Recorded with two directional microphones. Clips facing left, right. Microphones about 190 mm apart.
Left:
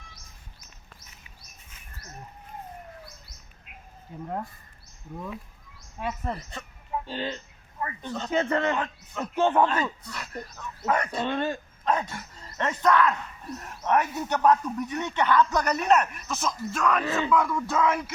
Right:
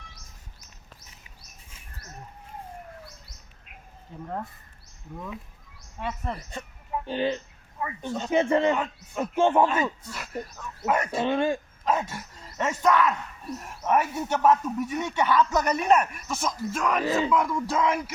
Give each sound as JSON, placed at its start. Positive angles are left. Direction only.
{"t": 4.1, "sound": "speech", "side_deg": 10}
{"t": 6.0, "sound": "speech", "side_deg": 10}
{"t": 7.1, "sound": "a man's voice", "side_deg": -15}